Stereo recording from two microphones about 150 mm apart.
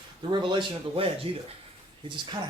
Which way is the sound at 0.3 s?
30° right (ahead or behind).